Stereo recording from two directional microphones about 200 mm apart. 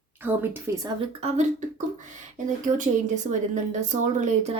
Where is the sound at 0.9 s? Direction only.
35° right (ahead or behind).